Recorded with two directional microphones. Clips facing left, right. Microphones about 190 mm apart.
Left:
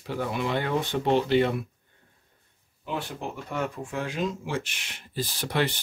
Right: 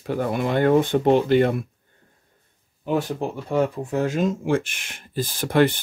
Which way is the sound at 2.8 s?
45° right (ahead or behind).